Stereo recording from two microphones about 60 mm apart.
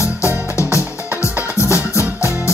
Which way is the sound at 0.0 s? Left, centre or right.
Left.